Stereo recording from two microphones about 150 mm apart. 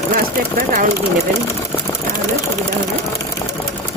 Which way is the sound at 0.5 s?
70° right (ahead or behind).